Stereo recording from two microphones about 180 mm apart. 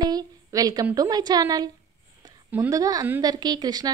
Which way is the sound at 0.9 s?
20° right (ahead or behind).